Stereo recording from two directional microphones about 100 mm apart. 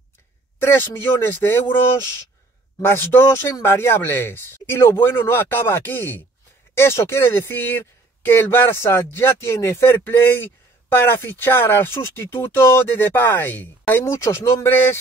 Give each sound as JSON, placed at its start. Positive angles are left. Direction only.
{"t": 0.6, "sound": "speech", "side_deg": 20}
{"t": 2.8, "sound": "speech", "side_deg": 25}